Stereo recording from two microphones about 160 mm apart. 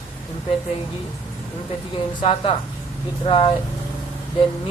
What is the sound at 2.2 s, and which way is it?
Speech, 35° left (ahead or behind).